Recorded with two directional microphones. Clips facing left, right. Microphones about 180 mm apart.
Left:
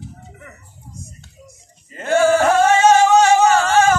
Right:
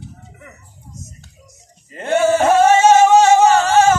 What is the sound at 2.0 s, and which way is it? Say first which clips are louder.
Singing: even; 25° right (ahead or behind).